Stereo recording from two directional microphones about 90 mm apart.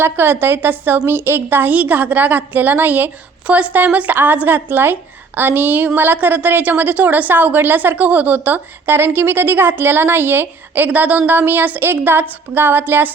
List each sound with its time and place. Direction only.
0.0 s a woman's voice: 25° right (ahead or behind)